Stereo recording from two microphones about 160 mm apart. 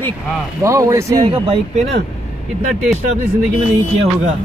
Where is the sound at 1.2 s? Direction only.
40° right (ahead or behind).